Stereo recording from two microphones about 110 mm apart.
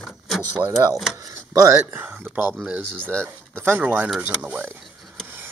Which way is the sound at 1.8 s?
15° right (ahead or behind).